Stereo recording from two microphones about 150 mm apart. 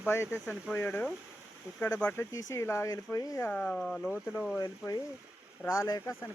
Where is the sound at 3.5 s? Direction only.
10° left (ahead or behind).